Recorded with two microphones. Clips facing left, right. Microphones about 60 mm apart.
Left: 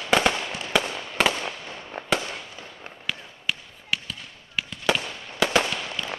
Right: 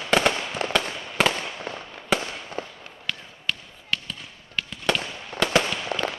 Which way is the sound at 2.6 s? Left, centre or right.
Right.